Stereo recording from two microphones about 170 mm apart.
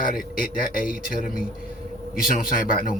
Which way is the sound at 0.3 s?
55° left (ahead or behind).